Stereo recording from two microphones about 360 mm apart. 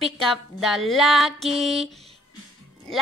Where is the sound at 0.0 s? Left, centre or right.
Centre.